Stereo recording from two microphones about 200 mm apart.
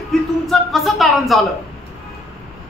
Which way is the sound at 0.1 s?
Centre (ahead or behind).